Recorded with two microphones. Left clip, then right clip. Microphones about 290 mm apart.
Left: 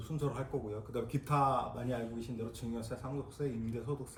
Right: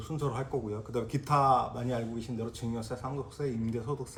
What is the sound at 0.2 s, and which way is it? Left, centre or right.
Speech, right.